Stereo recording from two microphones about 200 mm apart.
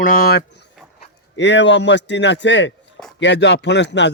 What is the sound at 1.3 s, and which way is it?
A man's voice, 60° left (ahead or behind).